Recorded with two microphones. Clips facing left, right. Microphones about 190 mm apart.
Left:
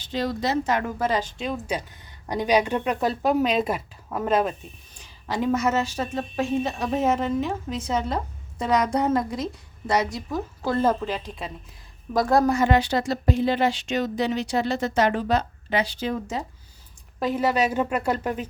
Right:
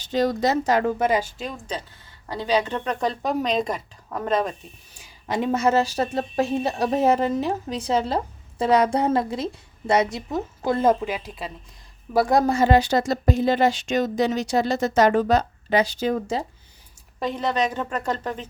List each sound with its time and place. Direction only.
0.1 s speech: 45° right (ahead or behind)
0.9 s speech: 15° right (ahead or behind)
1.4 s speech: 5° left (ahead or behind)
5.3 s speech: 25° right (ahead or behind)
12.4 s speech: 30° right (ahead or behind)
17.2 s speech: 5° left (ahead or behind)